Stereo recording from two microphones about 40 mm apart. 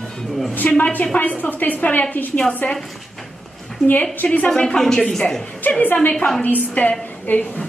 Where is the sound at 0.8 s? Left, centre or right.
Left.